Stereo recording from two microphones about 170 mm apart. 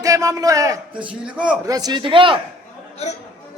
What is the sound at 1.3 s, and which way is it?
Speech, 5° right (ahead or behind).